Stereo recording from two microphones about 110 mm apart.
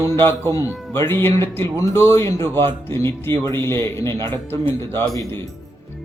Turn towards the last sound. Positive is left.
turn(degrees=25)  # may be behind; listen again after turning